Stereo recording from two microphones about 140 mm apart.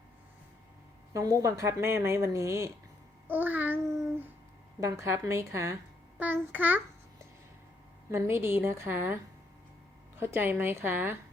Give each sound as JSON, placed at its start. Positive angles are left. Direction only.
{"t": 1.1, "sound": "speech", "side_deg": -25}
{"t": 3.2, "sound": "babbling", "side_deg": -15}
{"t": 4.8, "sound": "a woman's voice", "side_deg": -20}
{"t": 8.1, "sound": "a woman's voice", "side_deg": -20}
{"t": 10.2, "sound": "a woman's voice", "side_deg": -15}